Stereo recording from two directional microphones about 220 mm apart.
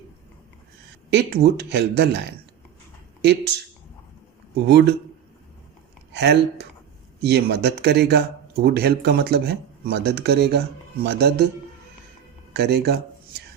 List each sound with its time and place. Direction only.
1.1 s speech: 50° right (ahead or behind)
4.6 s speech: 50° right (ahead or behind)
6.1 s speech: 50° right (ahead or behind)
12.5 s speech: 45° right (ahead or behind)